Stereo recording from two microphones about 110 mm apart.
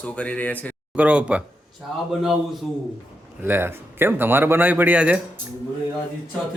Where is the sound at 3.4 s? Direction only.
20° right (ahead or behind).